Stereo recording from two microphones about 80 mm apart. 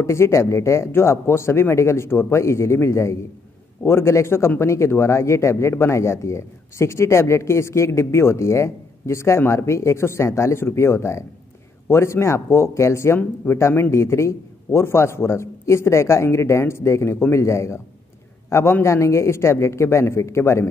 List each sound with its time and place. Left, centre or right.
0.0 s speech: left